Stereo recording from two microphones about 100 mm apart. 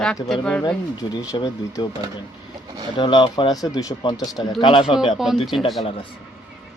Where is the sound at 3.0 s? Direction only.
50° left (ahead or behind).